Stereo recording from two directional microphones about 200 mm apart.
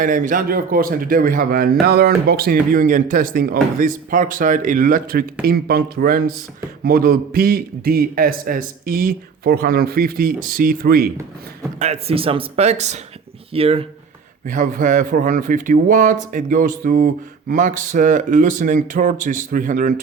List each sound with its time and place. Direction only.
0.0 s a man's voice: 40° right (ahead or behind)
11.8 s speech: 30° right (ahead or behind)
14.4 s speech: 40° right (ahead or behind)